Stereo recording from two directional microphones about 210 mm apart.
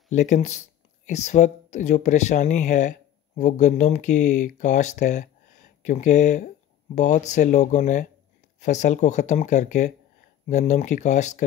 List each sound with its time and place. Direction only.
0.1 s speech: 35° left (ahead or behind)